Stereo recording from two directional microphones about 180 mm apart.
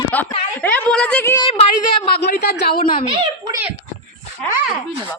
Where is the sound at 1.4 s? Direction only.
30° left (ahead or behind).